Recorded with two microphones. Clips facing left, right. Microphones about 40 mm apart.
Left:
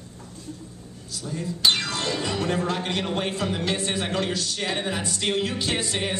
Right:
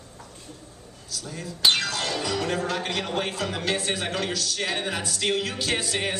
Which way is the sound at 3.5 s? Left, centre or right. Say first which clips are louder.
Left 1 dB; centre.